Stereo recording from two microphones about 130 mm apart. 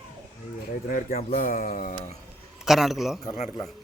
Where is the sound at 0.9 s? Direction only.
90° left.